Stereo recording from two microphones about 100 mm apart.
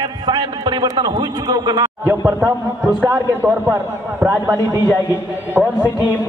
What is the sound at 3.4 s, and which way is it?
A man's voice, 25° right (ahead or behind).